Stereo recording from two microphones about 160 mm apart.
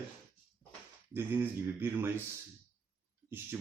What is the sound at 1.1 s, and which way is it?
Speech, 15° right (ahead or behind).